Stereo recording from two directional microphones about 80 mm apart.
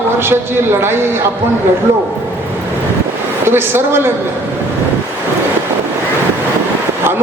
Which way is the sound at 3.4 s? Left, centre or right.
Right.